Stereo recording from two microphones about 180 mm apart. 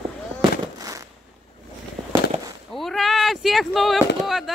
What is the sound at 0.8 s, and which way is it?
Fireworks, 20° right (ahead or behind).